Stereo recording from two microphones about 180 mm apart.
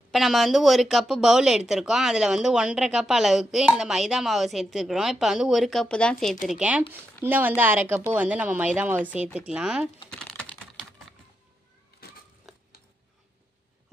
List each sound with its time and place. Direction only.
0.1 s speech: centre (ahead or behind)
6.5 s speech: 5° right (ahead or behind)
10.0 s typing: 5° left (ahead or behind)
12.0 s a sound: 60° left (ahead or behind)